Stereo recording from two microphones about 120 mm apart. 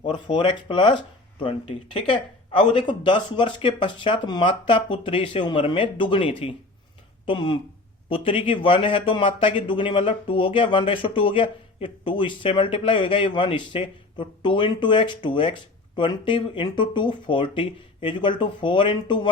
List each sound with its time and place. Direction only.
0.0 s speech: 40° left (ahead or behind)